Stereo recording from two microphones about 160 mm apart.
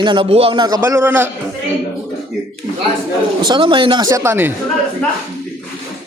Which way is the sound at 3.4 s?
30° right (ahead or behind).